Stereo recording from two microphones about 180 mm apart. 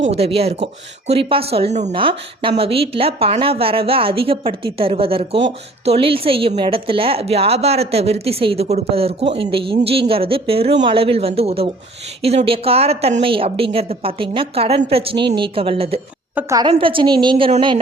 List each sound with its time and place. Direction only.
0.2 s speech: 35° right (ahead or behind)
16.3 s a woman's voice: 20° right (ahead or behind)